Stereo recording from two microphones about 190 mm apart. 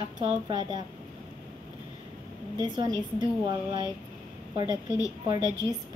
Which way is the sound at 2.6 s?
20° right (ahead or behind).